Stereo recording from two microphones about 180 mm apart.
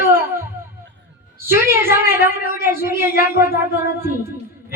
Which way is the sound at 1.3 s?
15° right (ahead or behind).